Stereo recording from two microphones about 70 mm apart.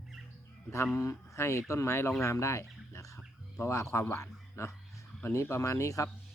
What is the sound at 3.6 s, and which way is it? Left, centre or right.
Speech, left.